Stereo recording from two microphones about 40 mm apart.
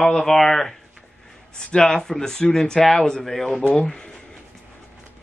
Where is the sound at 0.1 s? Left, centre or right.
Centre.